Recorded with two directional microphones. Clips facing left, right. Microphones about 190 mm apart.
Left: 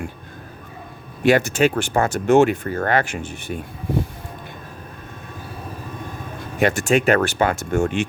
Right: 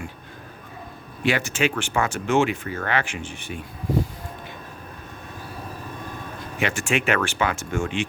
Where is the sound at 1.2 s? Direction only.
45° left (ahead or behind).